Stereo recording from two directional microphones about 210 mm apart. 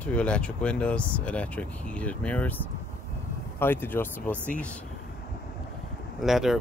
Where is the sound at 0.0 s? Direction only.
5° left (ahead or behind).